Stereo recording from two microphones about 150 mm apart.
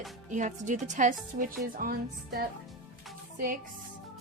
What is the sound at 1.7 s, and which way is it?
Speech, 75° right (ahead or behind).